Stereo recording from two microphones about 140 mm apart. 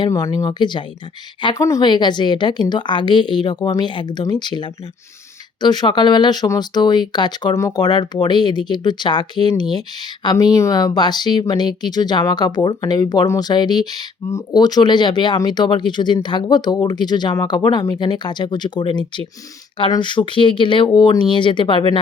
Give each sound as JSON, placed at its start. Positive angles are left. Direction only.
{"t": 0.0, "sound": "speech", "side_deg": 25}
{"t": 1.5, "sound": "speech", "side_deg": 20}